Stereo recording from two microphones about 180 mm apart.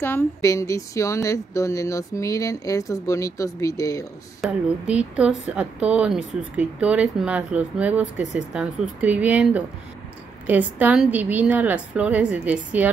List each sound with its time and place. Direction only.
0.0 s a woman's voice: 15° left (ahead or behind)
4.4 s speech: 5° right (ahead or behind)